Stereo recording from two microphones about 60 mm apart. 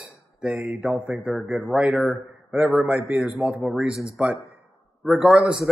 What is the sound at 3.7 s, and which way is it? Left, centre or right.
Speech, centre.